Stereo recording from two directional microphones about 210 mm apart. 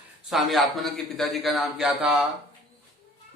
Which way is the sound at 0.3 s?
Centre (ahead or behind).